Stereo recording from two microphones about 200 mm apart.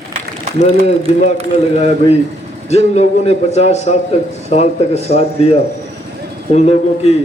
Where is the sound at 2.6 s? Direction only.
35° left (ahead or behind).